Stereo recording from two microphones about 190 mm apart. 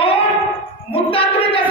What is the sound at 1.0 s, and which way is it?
Child singing, 30° left (ahead or behind).